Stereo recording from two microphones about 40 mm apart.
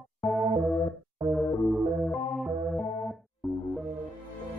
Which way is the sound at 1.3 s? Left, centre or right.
Centre.